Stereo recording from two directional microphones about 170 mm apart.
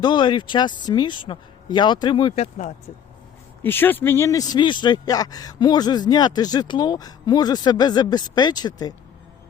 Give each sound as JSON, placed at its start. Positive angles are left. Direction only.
{"t": 0.0, "sound": "speech", "side_deg": 25}
{"t": 3.6, "sound": "speech", "side_deg": 10}